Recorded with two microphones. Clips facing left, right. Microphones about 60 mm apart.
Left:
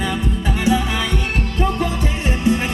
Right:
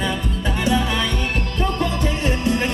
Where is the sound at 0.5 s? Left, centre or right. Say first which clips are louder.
Left 1 dB; centre.